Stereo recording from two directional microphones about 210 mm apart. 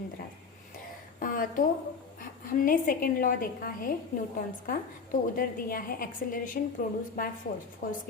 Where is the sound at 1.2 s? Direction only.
40° left (ahead or behind).